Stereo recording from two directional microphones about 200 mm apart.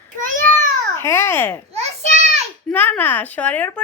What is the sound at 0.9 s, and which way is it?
Speech, 10° left (ahead or behind).